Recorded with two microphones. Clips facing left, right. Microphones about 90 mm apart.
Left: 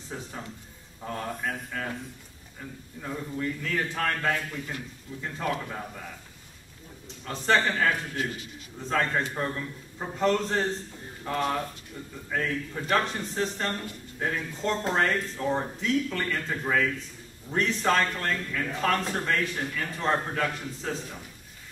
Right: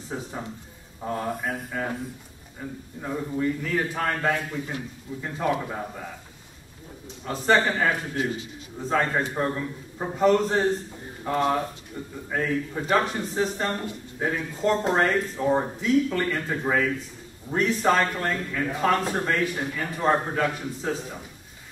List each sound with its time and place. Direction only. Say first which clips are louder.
0.1 s a man's voice: right 5 dB; 15° right (ahead or behind)
7.2 s a man's voice: right 3 dB; 10° right (ahead or behind)